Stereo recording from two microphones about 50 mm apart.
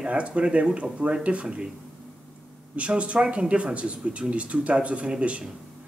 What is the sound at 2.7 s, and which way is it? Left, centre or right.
Speech, right.